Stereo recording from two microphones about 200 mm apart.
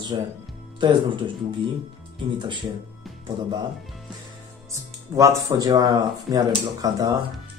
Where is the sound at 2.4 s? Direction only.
25° right (ahead or behind).